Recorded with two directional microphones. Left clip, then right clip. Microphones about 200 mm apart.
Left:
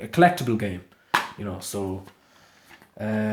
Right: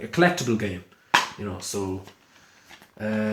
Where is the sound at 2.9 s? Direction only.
45° left (ahead or behind).